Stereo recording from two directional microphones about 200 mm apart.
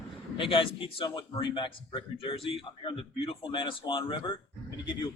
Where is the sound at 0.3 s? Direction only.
25° left (ahead or behind).